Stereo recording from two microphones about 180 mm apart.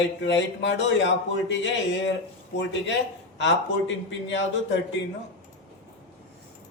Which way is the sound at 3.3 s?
85° left.